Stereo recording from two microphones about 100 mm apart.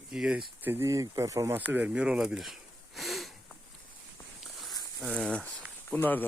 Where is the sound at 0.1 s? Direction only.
5° right (ahead or behind).